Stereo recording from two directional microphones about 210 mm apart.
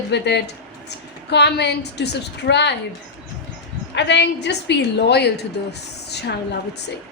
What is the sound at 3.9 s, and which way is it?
A woman's voice, 55° left (ahead or behind).